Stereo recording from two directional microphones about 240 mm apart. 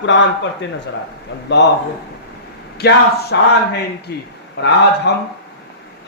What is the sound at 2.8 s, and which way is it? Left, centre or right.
Speech, left.